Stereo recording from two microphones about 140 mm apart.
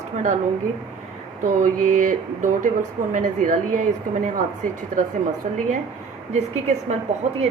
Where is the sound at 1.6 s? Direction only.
65° right (ahead or behind).